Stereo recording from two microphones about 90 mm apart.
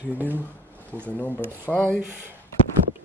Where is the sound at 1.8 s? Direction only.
25° right (ahead or behind).